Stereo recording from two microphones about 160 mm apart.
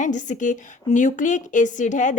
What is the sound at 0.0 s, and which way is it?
A woman's voice, 50° left (ahead or behind).